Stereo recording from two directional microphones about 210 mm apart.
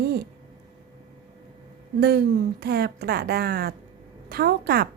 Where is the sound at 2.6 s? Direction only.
50° right (ahead or behind).